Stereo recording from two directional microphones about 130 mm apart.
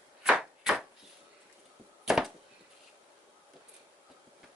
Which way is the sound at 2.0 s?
5° right (ahead or behind).